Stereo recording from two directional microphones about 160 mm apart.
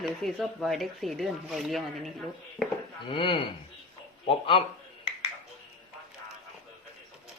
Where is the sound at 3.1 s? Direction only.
35° left (ahead or behind).